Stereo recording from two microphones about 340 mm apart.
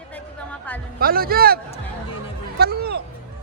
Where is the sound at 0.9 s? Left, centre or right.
Right.